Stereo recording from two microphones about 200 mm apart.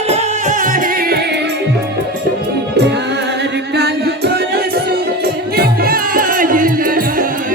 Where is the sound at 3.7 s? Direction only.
55° right (ahead or behind).